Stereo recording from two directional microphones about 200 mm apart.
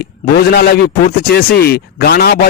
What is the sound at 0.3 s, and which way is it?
Speech, 50° left (ahead or behind).